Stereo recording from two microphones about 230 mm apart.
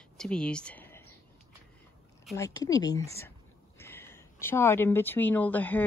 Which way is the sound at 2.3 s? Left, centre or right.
Centre.